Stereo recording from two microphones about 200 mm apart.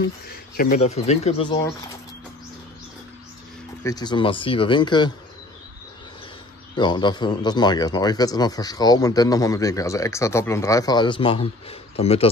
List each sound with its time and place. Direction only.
0.6 s speech: 40° left (ahead or behind)
3.8 s speech: 20° left (ahead or behind)
6.7 s speech: 20° left (ahead or behind)